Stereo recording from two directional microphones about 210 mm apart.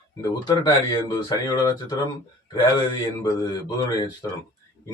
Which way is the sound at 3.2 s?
15° left (ahead or behind).